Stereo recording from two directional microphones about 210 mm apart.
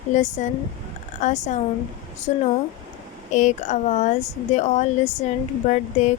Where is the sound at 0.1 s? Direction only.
35° left (ahead or behind).